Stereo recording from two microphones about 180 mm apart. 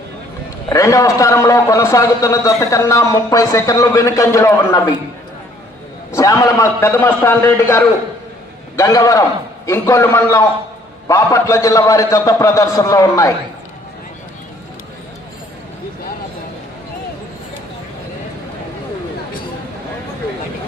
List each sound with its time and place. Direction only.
0.7 s a man's voice: 15° left (ahead or behind)
6.1 s a man's voice: 15° left (ahead or behind)